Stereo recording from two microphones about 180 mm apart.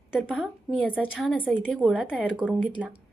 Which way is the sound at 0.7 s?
10° left (ahead or behind).